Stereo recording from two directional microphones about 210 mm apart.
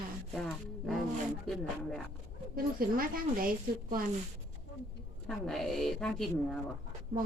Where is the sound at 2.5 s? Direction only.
45° right (ahead or behind).